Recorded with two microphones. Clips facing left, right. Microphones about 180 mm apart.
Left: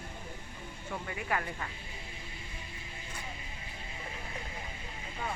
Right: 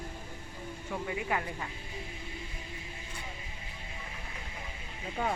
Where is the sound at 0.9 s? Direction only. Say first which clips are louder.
Right 2 dB; 15° right (ahead or behind).